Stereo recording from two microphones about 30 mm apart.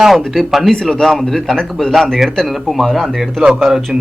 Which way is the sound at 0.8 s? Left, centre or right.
Centre.